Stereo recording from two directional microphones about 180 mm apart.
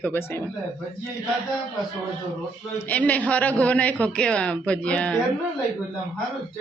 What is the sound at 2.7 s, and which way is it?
A man's voice, 10° left (ahead or behind).